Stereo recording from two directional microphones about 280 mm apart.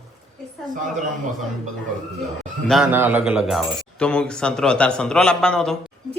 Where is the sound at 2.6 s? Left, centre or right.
Centre.